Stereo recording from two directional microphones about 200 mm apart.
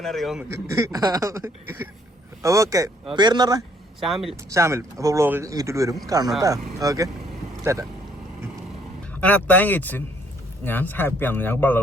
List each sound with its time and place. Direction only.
0.0 s a man's voice: centre (ahead or behind)
0.4 s speech: 15° right (ahead or behind)
4.0 s a man's voice: centre (ahead or behind)
4.4 s speech: 15° right (ahead or behind)
9.2 s speech: 10° left (ahead or behind)